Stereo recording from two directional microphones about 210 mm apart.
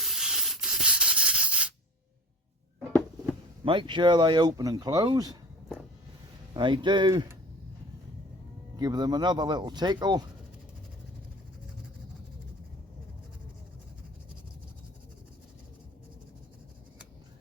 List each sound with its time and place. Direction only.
0.0 s sanding: centre (ahead or behind)
3.6 s speech: 25° right (ahead or behind)
6.5 s speech: 20° right (ahead or behind)
8.7 s speech: 20° right (ahead or behind)